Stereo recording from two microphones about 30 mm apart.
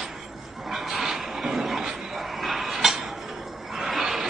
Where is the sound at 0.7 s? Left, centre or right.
Centre.